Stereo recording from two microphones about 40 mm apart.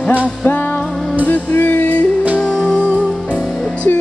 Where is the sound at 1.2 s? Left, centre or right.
Left.